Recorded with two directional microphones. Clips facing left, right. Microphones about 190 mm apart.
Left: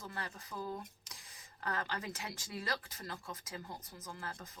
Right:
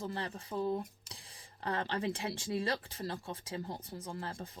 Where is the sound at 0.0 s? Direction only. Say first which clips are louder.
Right 6 dB; 30° right (ahead or behind).